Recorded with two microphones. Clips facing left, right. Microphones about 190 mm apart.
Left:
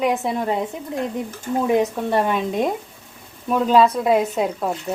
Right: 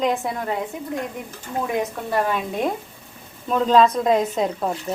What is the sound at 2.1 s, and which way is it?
Speech, 20° left (ahead or behind).